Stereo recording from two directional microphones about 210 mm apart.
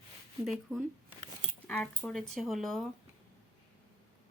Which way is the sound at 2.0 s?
Centre (ahead or behind).